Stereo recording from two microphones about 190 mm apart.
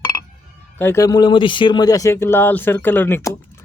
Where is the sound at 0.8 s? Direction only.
15° left (ahead or behind).